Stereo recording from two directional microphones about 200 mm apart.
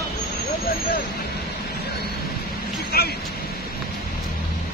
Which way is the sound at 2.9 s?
50° left (ahead or behind).